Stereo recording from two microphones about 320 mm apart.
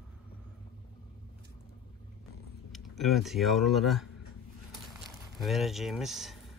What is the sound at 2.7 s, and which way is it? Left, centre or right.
Speech, centre.